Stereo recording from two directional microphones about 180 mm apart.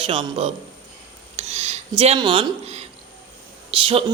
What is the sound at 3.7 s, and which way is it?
Speech, 30° right (ahead or behind).